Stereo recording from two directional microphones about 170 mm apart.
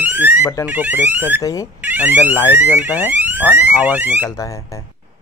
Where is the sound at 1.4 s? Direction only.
20° left (ahead or behind).